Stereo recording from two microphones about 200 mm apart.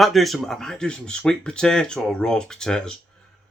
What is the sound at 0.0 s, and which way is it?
Speech, centre (ahead or behind).